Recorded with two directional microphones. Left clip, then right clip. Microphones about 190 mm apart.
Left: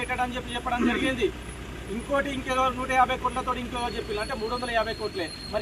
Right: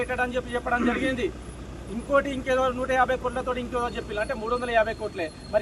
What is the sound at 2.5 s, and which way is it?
Speech, 5° right (ahead or behind).